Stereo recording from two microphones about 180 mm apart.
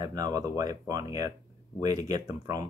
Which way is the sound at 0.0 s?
20° right (ahead or behind).